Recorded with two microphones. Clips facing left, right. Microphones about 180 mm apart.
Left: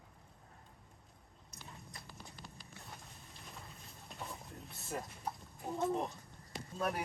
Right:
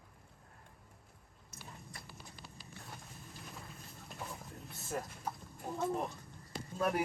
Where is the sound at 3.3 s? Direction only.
Centre (ahead or behind).